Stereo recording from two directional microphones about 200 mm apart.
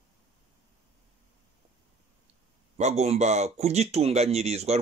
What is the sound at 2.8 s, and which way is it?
Speech, 35° right (ahead or behind).